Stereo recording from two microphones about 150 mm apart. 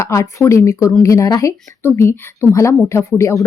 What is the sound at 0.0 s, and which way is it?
A woman's voice, 20° left (ahead or behind).